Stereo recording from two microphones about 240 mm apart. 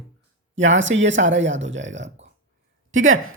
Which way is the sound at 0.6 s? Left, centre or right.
Right.